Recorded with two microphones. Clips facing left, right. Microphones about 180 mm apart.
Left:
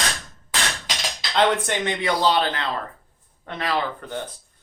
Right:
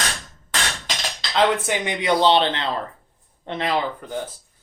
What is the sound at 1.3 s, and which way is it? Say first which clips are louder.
Speech: right 1 dB; 5° right (ahead or behind).